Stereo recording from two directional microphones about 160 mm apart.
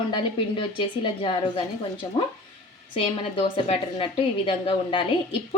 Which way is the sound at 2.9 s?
35° left (ahead or behind).